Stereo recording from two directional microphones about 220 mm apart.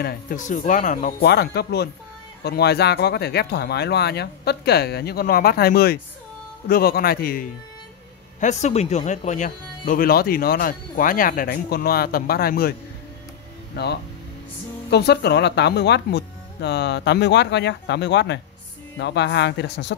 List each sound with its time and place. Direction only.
0.0 s speech: 35° left (ahead or behind)
8.4 s speech: 30° left (ahead or behind)
13.8 s speech: 45° left (ahead or behind)